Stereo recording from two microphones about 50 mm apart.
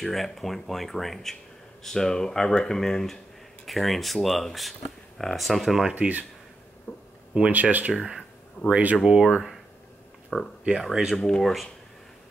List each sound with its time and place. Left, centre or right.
0.0 s speech: centre
5.9 s speech: right
6.9 s a sound: left
7.3 s speech: right
7.9 s speech: centre
8.6 s speech: right
9.2 s speech: centre
10.9 s speech: centre
11.1 s speech: centre